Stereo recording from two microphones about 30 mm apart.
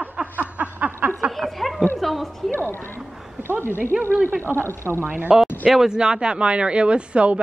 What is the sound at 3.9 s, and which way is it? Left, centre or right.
Speech, centre.